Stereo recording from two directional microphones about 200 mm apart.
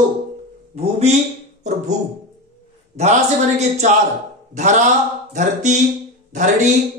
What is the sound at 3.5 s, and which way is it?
A man's voice, 35° right (ahead or behind).